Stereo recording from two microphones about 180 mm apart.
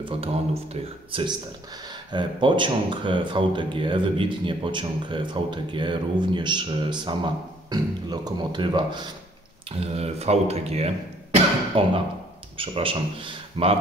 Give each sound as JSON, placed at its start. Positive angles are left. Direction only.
{"t": 0.0, "sound": "speech", "side_deg": -30}